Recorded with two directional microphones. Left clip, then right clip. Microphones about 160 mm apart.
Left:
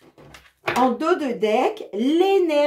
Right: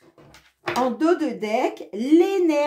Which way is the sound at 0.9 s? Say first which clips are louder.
Even; 35° right (ahead or behind).